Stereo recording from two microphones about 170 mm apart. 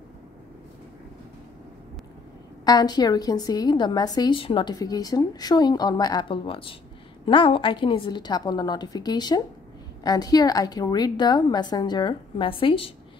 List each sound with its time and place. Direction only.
2.6 s a woman's voice: 25° left (ahead or behind)